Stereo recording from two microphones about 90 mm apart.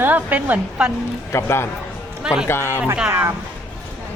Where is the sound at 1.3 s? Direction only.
30° left (ahead or behind).